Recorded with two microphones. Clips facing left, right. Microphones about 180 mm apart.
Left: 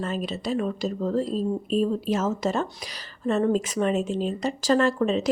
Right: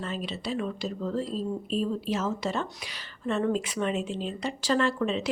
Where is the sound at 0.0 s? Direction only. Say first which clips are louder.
Left 5 dB; 45° left (ahead or behind).